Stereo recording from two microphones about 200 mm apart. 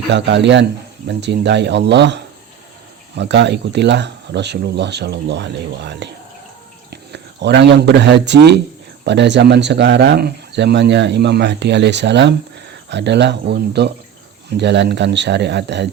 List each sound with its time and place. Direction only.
0.1 s speech: 60° right (ahead or behind)